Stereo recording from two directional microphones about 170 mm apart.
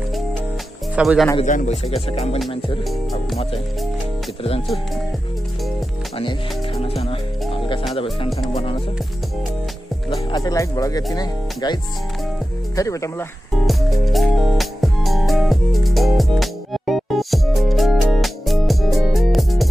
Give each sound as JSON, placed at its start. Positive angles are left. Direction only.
{"t": 0.9, "sound": "speech", "side_deg": 0}
{"t": 1.4, "sound": "speech", "side_deg": 45}
{"t": 4.4, "sound": "speech", "side_deg": 35}
{"t": 7.9, "sound": "music", "side_deg": 35}
{"t": 10.0, "sound": "speech", "side_deg": 20}
{"t": 13.7, "sound": "music", "side_deg": 0}